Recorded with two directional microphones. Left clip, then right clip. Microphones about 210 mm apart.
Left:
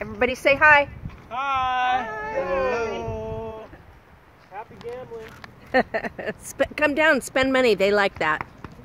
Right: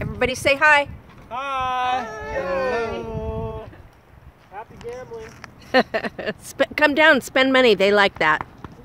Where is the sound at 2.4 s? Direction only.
40° right (ahead or behind).